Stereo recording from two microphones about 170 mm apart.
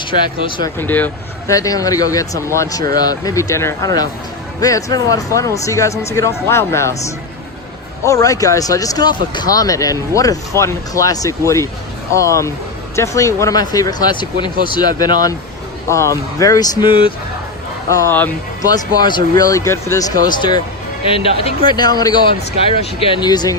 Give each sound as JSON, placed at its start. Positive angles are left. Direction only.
{"t": 0.0, "sound": "speech", "side_deg": 30}
{"t": 0.8, "sound": "speech", "side_deg": 10}
{"t": 8.0, "sound": "speech", "side_deg": 20}
{"t": 17.8, "sound": "speech", "side_deg": 20}